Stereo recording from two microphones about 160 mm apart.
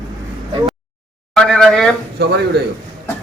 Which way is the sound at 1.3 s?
5° left (ahead or behind).